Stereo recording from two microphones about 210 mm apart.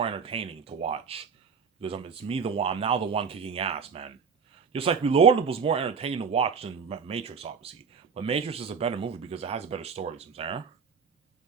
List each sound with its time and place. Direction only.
0.0 s speech: 25° right (ahead or behind)